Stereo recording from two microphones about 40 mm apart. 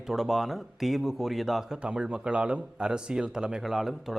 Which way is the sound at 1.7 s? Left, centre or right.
Right.